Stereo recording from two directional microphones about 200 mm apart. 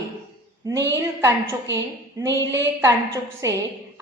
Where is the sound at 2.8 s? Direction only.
15° right (ahead or behind).